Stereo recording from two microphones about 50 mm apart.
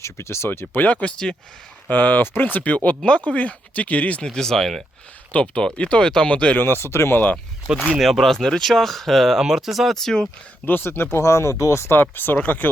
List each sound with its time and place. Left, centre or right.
0.0 s speech: left
1.0 s speech: centre
1.9 s speech: left
4.2 s speech: centre
5.3 s speech: left
6.6 s speech: left
7.9 s speech: centre
10.7 s speech: left
11.2 s speech: left
11.9 s speech: left